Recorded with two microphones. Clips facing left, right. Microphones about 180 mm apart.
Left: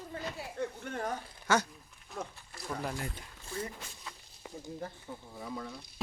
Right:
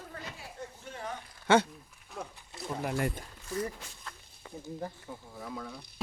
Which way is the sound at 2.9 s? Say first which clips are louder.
Right 8 dB; 60° right (ahead or behind).